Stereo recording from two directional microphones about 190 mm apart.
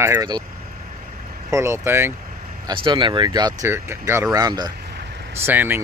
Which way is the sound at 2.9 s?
25° right (ahead or behind).